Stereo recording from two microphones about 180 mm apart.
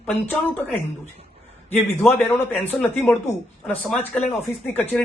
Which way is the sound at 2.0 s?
Centre (ahead or behind).